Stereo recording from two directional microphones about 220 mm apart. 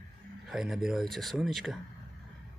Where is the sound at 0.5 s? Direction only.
Centre (ahead or behind).